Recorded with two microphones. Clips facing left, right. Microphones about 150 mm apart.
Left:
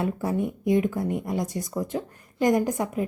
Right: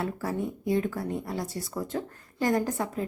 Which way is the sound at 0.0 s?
20° left (ahead or behind).